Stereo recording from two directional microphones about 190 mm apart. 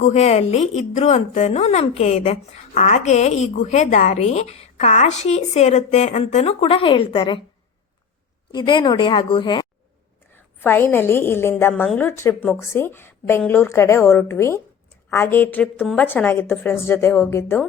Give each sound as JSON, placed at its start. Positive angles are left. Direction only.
{"t": 0.0, "sound": "a woman's voice", "side_deg": 35}
{"t": 8.5, "sound": "a woman's voice", "side_deg": 25}
{"t": 10.3, "sound": "a woman's voice", "side_deg": 10}